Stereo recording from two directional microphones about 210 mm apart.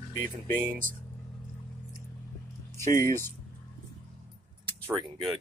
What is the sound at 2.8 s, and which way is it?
Speech, 10° left (ahead or behind).